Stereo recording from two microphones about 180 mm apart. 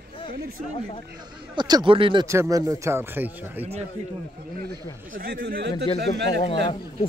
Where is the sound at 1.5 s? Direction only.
25° right (ahead or behind).